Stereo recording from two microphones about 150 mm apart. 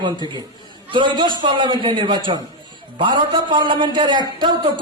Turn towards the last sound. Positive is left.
turn(degrees=-30)  # may be behind; listen again after turning